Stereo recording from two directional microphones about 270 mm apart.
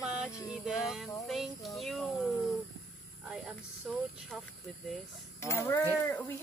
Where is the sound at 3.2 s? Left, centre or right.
Centre.